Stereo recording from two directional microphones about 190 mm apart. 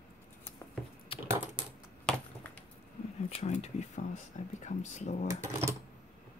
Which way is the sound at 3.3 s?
35° left (ahead or behind).